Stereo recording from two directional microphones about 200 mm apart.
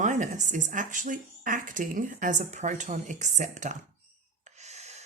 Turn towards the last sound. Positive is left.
turn(degrees=-35)  # may be behind; listen again after turning